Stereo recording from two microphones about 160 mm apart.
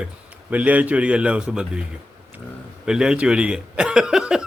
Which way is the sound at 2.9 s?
5° right (ahead or behind).